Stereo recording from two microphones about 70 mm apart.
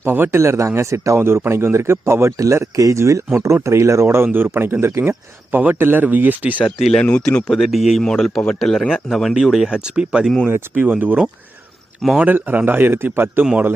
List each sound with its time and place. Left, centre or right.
0.0 s a man's voice: right
7.0 s speech: centre
7.5 s speech: centre
8.0 s speech: centre; by 11.2 s right
12.2 s speech: right
13.4 s speech: centre